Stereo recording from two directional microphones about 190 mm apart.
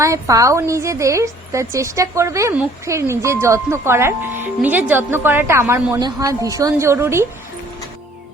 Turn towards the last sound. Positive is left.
turn(degrees=-15)  # may be behind; listen again after turning